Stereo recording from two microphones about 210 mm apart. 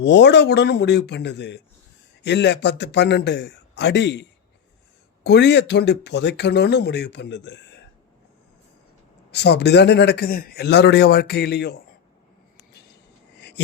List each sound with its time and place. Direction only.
0.0 s a man's voice: 55° left (ahead or behind)
9.3 s speech: 55° left (ahead or behind)